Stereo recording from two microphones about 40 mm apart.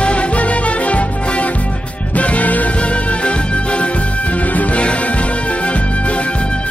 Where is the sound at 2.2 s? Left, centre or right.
Left.